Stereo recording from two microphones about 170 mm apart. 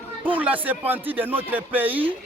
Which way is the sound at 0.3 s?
10° right (ahead or behind).